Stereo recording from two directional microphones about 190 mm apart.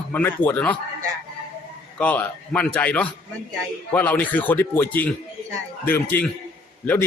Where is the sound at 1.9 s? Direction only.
10° left (ahead or behind).